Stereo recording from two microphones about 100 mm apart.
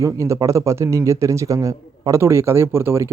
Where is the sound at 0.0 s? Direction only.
30° right (ahead or behind).